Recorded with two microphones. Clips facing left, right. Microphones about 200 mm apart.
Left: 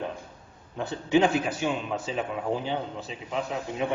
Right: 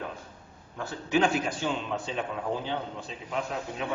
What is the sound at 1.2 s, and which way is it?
A man's voice, 10° left (ahead or behind).